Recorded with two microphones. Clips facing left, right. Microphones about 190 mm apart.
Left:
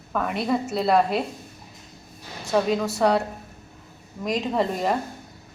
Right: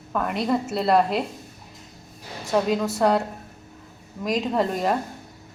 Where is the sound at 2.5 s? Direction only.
Centre (ahead or behind).